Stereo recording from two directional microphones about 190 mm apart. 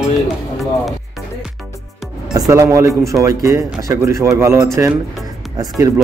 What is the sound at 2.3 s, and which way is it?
Speech, 15° right (ahead or behind).